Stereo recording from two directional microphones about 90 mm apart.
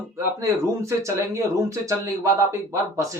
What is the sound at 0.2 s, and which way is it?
Speech, 30° right (ahead or behind).